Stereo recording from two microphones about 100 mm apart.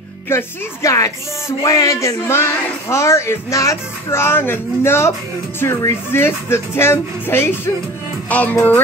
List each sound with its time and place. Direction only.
0.3 s speech: 25° left (ahead or behind)
6.1 s speech: 25° left (ahead or behind)
8.3 s music: 15° left (ahead or behind)